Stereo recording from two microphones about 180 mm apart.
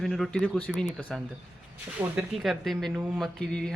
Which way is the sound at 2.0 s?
20° right (ahead or behind).